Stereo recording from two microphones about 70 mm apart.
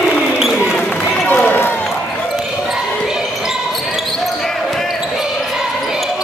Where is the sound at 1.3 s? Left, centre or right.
Left.